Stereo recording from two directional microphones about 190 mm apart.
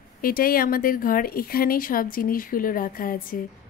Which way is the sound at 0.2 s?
50° left (ahead or behind).